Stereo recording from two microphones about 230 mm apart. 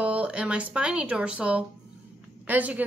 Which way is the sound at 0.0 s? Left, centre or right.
Centre.